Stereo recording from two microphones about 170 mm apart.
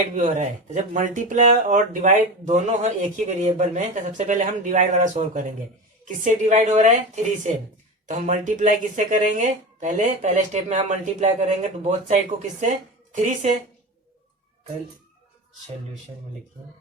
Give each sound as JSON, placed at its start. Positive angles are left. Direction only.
{"t": 0.2, "sound": "speech", "side_deg": -45}